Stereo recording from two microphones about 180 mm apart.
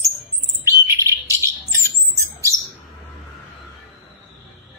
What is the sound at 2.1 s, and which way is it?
Squawk, 15° right (ahead or behind).